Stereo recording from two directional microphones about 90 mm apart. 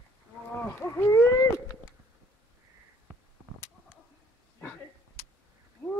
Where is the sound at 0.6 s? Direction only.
25° left (ahead or behind).